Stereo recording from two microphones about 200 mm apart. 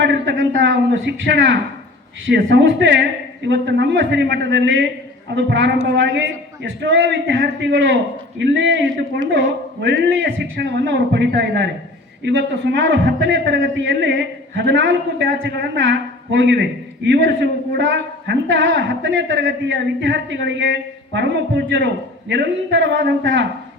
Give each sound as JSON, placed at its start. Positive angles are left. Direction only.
{"t": 0.0, "sound": "a man's voice", "side_deg": -60}